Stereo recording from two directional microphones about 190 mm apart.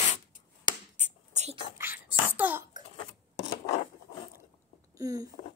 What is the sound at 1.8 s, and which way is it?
Cough, 10° right (ahead or behind).